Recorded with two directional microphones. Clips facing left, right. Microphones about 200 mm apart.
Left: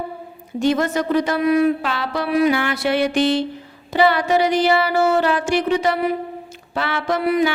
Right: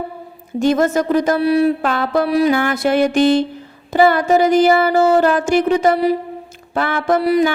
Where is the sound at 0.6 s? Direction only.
45° right (ahead or behind).